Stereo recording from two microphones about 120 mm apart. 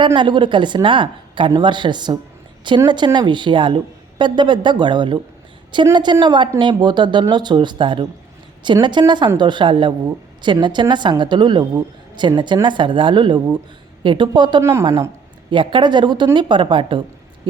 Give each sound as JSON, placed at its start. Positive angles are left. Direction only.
{"t": 0.0, "sound": "a woman's voice", "side_deg": -40}
{"t": 14.6, "sound": "a woman's voice", "side_deg": -20}
{"t": 15.4, "sound": "speech", "side_deg": -40}